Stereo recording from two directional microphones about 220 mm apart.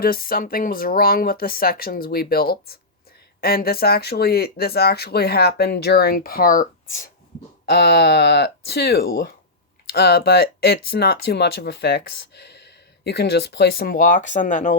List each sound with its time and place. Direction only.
0.0 s speech: 40° left (ahead or behind)